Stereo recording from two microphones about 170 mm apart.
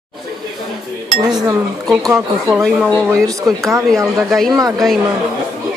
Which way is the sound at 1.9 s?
Centre (ahead or behind).